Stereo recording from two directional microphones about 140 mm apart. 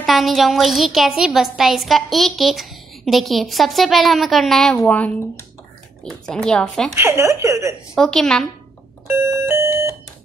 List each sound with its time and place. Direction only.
0.0 s a woman's voice: centre (ahead or behind)
7.0 s speech: 20° right (ahead or behind)
7.9 s a woman's voice: 5° left (ahead or behind)
9.0 s music: 15° right (ahead or behind)